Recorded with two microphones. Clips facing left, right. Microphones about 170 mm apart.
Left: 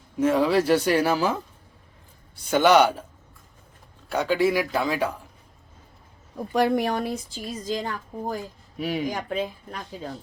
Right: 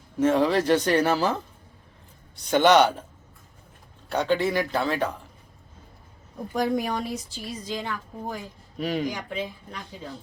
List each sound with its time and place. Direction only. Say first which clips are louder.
0.2 s speech: left 1 dB; 10° left (ahead or behind)
4.1 s speech: left 2 dB; 10° left (ahead or behind)
6.5 s a woman's voice: left 3 dB; 70° left (ahead or behind); by 8.4 s 40° left (ahead or behind)
8.8 s speech: even; 5° left (ahead or behind)
9.0 s speech: left 3 dB; 45° left (ahead or behind)